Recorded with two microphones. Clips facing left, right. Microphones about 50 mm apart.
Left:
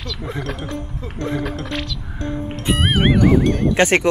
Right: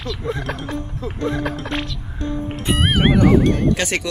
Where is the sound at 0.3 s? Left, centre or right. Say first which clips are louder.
Right 2 dB; centre.